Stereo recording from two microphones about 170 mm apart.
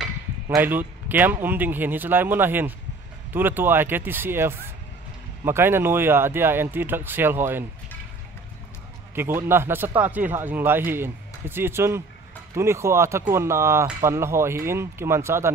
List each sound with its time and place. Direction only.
0.6 s speech: 10° right (ahead or behind)
9.1 s speech: 15° right (ahead or behind)